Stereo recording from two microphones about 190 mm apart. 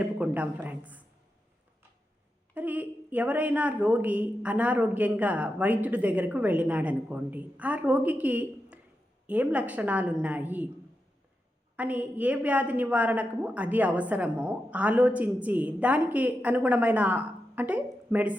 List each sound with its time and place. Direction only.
0.0 s a woman's voice: 5° right (ahead or behind)
2.6 s a woman's voice: 10° right (ahead or behind)
11.8 s a woman's voice: 10° right (ahead or behind)